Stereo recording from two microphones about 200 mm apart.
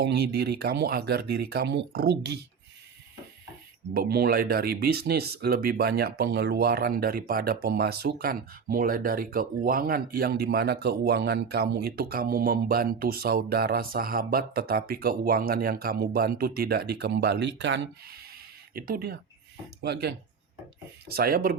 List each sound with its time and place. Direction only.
0.0 s speech: 55° right (ahead or behind)
3.9 s speech: 50° right (ahead or behind)